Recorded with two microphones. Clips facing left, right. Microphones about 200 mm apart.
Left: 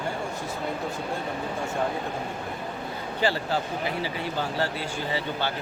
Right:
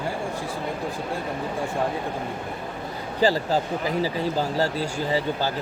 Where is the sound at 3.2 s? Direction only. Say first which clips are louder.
Right 5 dB; 40° right (ahead or behind).